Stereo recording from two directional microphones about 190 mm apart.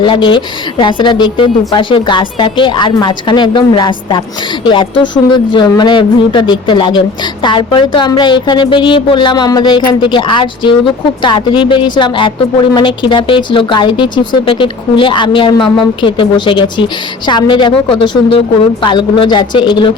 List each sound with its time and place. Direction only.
0.0 s speech: 25° left (ahead or behind)